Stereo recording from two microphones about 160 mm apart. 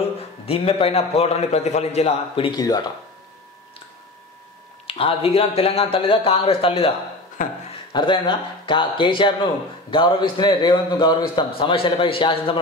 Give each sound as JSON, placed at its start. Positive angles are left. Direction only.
{"t": 0.5, "sound": "a man's voice", "side_deg": 35}
{"t": 4.8, "sound": "a man's voice", "side_deg": 35}
{"t": 7.4, "sound": "speech", "side_deg": 55}
{"t": 7.9, "sound": "speech", "side_deg": 30}